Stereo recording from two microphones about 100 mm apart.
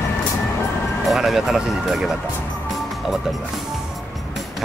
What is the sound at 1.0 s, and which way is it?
Speech, centre (ahead or behind).